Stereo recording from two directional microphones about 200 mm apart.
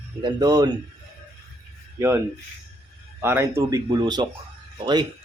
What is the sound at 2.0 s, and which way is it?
A man's voice, 15° right (ahead or behind).